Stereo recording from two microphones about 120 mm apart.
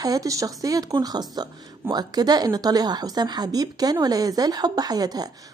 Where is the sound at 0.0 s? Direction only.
30° right (ahead or behind).